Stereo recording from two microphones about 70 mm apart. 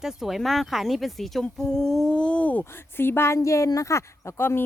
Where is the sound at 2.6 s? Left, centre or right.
Left.